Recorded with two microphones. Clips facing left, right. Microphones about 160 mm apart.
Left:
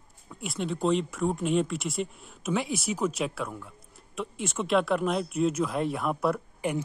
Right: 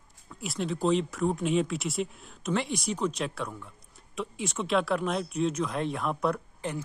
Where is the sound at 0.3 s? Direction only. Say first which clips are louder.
Even; centre (ahead or behind).